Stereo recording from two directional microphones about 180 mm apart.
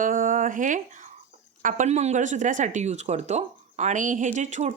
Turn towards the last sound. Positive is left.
turn(degrees=-40)  # may be behind; listen again after turning